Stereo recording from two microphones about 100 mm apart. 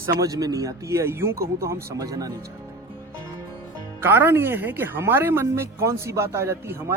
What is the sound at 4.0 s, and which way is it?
Speech, 25° right (ahead or behind).